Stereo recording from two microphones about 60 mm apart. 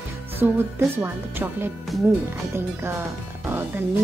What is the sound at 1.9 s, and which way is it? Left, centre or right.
Speech, centre.